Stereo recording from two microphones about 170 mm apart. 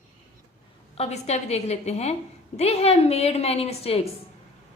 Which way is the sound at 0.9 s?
40° left (ahead or behind).